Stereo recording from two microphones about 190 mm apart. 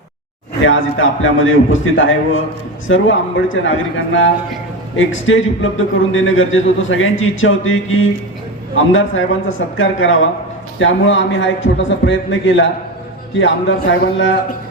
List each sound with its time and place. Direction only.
0.6 s a man's voice: 90° left; by 14.3 s 70° left (ahead or behind)